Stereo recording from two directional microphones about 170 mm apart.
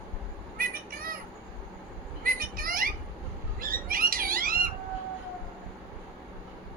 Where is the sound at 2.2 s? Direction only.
55° right (ahead or behind).